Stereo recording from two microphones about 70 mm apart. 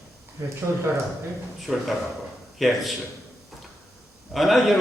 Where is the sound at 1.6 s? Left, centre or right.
Centre.